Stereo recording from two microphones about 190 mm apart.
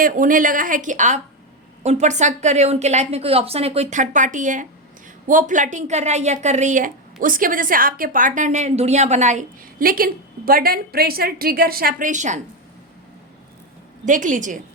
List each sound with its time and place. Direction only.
0.0 s a woman's voice: 45° right (ahead or behind)
14.0 s a woman's voice: 40° right (ahead or behind)